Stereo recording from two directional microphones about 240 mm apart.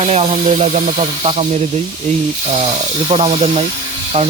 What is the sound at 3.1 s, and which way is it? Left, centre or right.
Speech, right.